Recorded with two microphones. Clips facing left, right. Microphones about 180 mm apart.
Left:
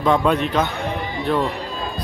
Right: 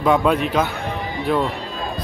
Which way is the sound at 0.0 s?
5° right (ahead or behind).